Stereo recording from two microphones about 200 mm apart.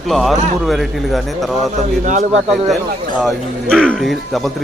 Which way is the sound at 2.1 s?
35° right (ahead or behind).